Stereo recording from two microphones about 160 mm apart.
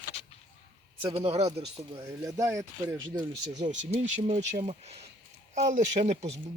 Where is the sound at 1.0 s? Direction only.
40° right (ahead or behind).